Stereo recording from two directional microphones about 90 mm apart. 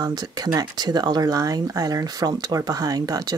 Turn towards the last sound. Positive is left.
turn(degrees=-45)  # may be behind; listen again after turning